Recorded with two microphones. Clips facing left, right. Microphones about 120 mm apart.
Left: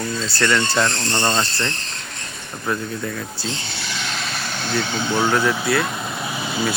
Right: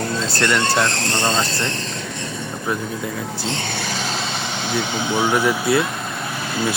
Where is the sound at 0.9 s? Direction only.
90° right.